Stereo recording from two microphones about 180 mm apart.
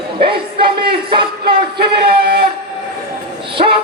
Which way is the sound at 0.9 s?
30° right (ahead or behind).